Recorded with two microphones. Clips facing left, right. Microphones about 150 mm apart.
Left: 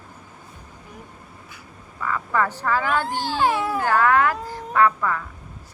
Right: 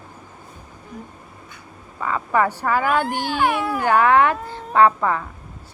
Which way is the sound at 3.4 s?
20° left (ahead or behind).